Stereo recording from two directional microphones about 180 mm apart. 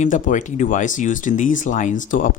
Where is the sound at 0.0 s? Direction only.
45° left (ahead or behind).